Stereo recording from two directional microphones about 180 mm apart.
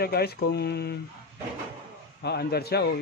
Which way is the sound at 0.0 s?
60° left (ahead or behind).